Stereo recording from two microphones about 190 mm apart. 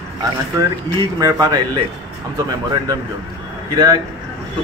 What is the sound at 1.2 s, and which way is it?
Speech, 20° right (ahead or behind).